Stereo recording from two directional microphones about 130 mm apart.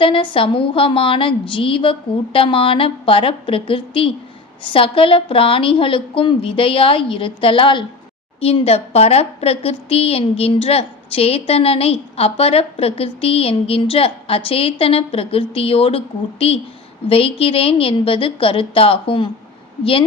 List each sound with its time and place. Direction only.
0.0 s a woman's voice: 40° left (ahead or behind)
8.4 s a woman's voice: 50° left (ahead or behind)